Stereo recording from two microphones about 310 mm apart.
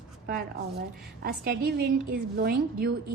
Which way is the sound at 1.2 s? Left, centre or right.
Right.